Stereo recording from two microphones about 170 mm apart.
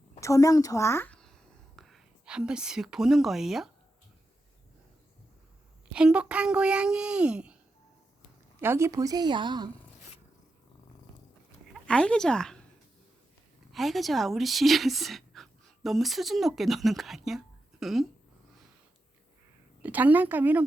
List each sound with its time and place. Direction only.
0.2 s a woman's voice: 20° left (ahead or behind); by 3.7 s centre (ahead or behind)
5.9 s speech: 5° right (ahead or behind)
8.6 s a woman's voice: 15° right (ahead or behind)
11.7 s speech: 5° left (ahead or behind)
13.7 s speech: centre (ahead or behind)
19.8 s a woman's voice: 10° right (ahead or behind)